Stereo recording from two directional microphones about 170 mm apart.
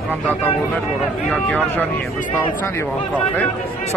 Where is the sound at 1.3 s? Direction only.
10° left (ahead or behind).